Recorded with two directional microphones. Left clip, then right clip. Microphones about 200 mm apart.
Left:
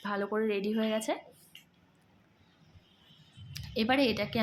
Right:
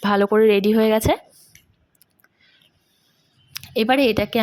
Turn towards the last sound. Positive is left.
turn(degrees=-40)  # may be behind; listen again after turning